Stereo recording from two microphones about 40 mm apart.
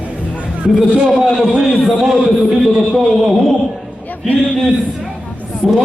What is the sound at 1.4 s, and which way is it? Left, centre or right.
A man's voice, centre.